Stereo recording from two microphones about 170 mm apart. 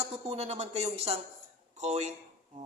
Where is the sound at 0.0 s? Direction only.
40° right (ahead or behind).